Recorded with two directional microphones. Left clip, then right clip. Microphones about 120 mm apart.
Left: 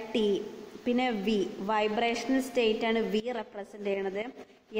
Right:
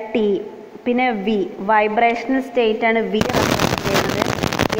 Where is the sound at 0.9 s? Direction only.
25° left (ahead or behind).